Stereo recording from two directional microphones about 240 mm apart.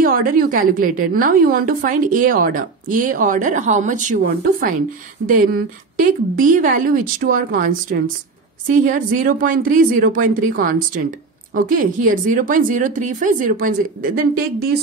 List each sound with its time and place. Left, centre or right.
0.0 s speech: right